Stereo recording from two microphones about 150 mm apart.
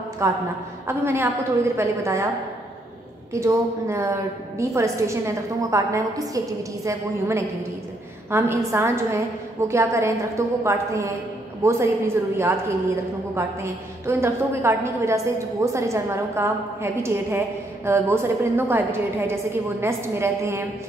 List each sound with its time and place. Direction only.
0.2 s a woman's voice: 20° right (ahead or behind)
3.3 s a woman's voice: 20° right (ahead or behind)